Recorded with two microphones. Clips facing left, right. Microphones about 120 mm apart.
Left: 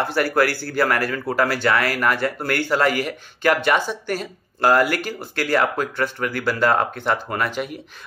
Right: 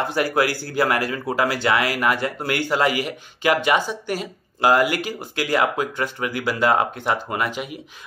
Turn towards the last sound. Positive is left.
turn(degrees=-10)  # may be behind; listen again after turning